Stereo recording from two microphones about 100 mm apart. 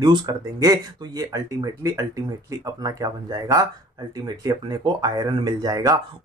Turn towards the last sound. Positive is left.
turn(degrees=-40)  # may be behind; listen again after turning